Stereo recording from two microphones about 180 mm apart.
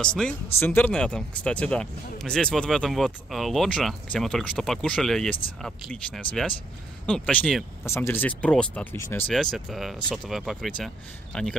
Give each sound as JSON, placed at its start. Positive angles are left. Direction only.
{"t": 0.0, "sound": "speech", "side_deg": 5}
{"t": 9.3, "sound": "speech", "side_deg": 0}